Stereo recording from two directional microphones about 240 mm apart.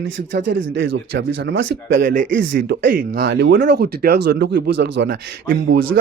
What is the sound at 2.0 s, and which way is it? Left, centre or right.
Speech, right.